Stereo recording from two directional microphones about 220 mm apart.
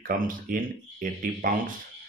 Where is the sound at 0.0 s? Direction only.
40° right (ahead or behind).